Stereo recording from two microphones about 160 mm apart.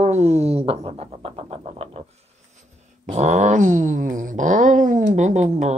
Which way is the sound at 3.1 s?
45° right (ahead or behind).